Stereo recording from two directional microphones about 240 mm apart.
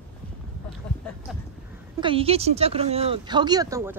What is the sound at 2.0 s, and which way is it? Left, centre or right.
A woman's voice, right.